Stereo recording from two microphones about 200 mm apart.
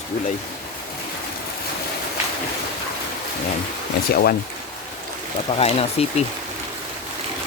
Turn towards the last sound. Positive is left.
turn(degrees=30)  # may be behind; listen again after turning